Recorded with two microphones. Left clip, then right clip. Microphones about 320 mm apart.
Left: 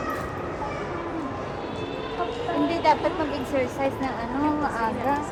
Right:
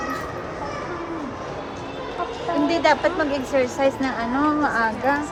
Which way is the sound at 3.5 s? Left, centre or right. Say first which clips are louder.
Right 6 dB; right.